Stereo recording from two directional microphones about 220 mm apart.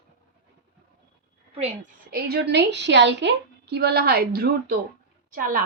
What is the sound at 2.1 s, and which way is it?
A woman's voice, 45° right (ahead or behind).